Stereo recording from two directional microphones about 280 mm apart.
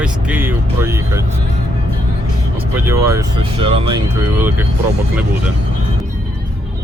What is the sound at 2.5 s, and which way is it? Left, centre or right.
Speech, centre.